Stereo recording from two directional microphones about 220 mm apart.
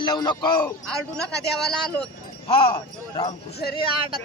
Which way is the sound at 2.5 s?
25° left (ahead or behind).